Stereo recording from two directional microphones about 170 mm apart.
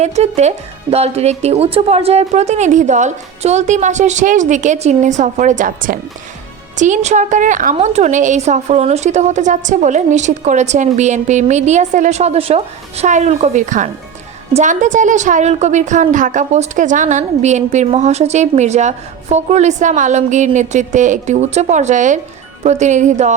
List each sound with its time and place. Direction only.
0.0 s a woman's voice: 40° right (ahead or behind)